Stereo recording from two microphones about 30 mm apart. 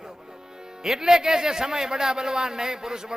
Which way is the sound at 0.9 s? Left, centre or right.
Centre.